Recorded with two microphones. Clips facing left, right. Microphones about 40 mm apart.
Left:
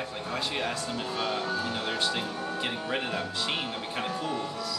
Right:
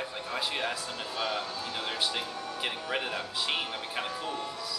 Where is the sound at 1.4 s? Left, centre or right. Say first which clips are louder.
Left 6 dB; left.